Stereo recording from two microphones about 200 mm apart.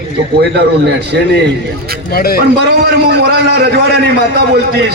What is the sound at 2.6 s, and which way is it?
A man's voice, 55° right (ahead or behind).